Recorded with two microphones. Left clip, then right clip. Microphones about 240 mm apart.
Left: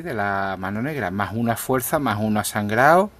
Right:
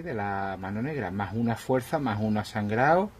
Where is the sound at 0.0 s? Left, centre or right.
Left.